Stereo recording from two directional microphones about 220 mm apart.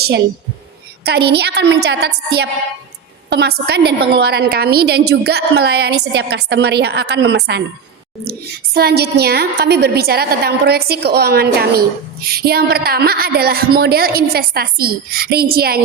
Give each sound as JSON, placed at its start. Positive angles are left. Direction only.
{"t": 1.0, "sound": "a woman's voice", "side_deg": -45}